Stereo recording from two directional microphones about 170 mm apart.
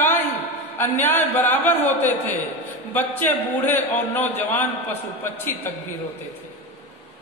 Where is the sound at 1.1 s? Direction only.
10° left (ahead or behind).